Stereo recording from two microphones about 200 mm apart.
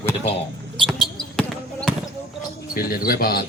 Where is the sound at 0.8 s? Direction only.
Centre (ahead or behind).